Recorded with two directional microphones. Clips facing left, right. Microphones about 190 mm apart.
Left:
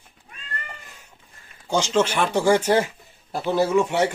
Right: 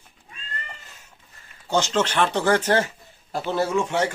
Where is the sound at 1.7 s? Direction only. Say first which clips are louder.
Left 1 dB; 10° left (ahead or behind).